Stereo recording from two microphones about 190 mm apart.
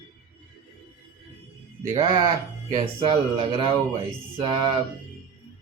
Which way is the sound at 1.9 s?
25° right (ahead or behind).